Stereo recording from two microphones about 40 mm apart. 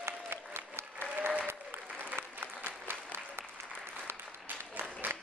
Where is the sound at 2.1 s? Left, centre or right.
Right.